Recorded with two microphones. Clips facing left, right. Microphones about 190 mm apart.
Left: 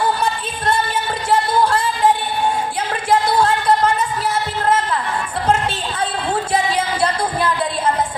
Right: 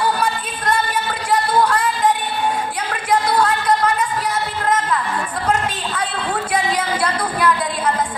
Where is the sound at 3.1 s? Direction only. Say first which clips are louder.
Left 1 dB; 25° left (ahead or behind).